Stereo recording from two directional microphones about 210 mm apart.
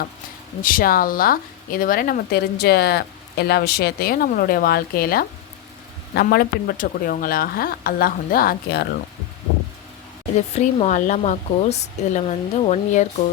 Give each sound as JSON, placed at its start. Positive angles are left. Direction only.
{"t": 0.6, "sound": "speech", "side_deg": 40}
{"t": 10.3, "sound": "speech", "side_deg": 30}